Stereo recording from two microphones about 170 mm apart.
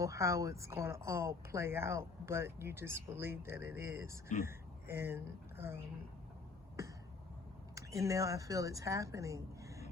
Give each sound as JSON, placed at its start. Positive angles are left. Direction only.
{"t": 0.0, "sound": "speech", "side_deg": -15}
{"t": 7.8, "sound": "a woman's voice", "side_deg": -20}